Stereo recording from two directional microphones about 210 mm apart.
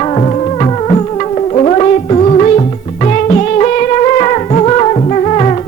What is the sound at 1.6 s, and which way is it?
Music, 30° left (ahead or behind).